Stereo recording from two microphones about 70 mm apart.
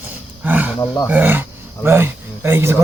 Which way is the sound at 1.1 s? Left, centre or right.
Right.